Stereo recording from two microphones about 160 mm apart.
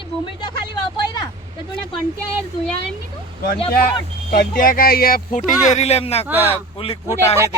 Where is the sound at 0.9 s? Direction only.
25° left (ahead or behind).